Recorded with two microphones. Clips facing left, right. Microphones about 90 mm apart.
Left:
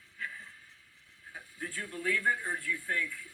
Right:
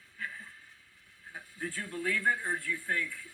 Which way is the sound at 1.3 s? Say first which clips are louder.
Right 2 dB; 30° right (ahead or behind).